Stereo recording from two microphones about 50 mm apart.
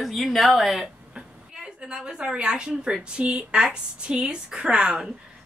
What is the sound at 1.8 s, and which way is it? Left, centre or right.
A woman's voice, centre.